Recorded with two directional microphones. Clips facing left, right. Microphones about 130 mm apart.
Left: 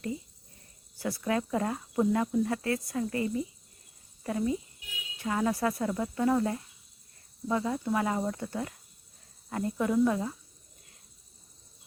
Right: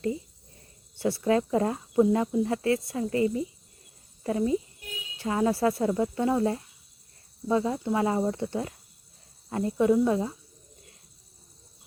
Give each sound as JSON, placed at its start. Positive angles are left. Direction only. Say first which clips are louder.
{"t": 0.9, "sound": "speech", "louder": "right 6 dB", "side_deg": -30}